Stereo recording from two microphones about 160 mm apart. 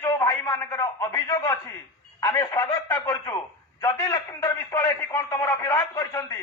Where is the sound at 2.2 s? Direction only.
20° left (ahead or behind).